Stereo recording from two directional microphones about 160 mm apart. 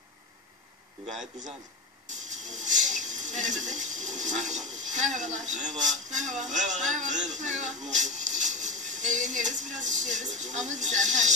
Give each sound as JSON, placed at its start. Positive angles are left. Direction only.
{"t": 2.0, "sound": "speech", "side_deg": -50}